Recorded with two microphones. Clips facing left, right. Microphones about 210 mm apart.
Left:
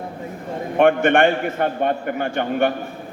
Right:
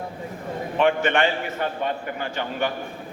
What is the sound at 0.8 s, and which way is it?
A man's voice, 55° left (ahead or behind).